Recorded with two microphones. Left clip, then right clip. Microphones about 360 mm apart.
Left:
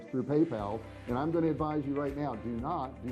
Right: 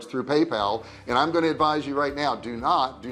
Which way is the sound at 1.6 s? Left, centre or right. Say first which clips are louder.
Right 10 dB; centre.